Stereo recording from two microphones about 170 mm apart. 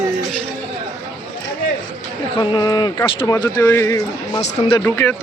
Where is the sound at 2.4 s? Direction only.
25° left (ahead or behind).